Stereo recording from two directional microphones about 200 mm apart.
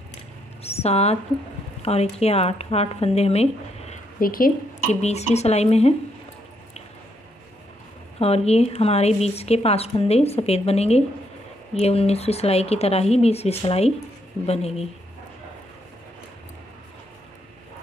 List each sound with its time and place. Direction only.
0.7 s a woman's voice: 30° left (ahead or behind)
3.9 s a sound: 45° left (ahead or behind)
5.0 s a woman's voice: 35° left (ahead or behind)
8.2 s a woman's voice: 30° left (ahead or behind)